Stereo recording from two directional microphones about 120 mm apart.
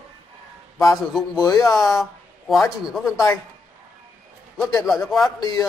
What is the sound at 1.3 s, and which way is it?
Speech, 30° left (ahead or behind).